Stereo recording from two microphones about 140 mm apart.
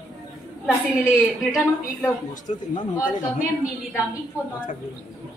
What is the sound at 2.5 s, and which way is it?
Speech, 50° left (ahead or behind).